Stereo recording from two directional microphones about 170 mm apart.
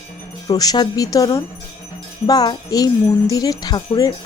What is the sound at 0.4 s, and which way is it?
Speech, 20° left (ahead or behind).